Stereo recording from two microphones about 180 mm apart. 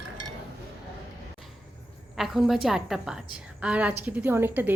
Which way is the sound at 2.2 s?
Centre (ahead or behind).